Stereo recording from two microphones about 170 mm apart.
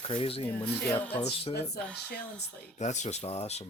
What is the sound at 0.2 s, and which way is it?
Speech, 35° left (ahead or behind).